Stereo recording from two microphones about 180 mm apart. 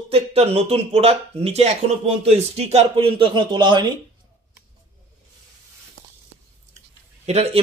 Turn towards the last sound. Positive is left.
turn(degrees=-35)  # may be behind; listen again after turning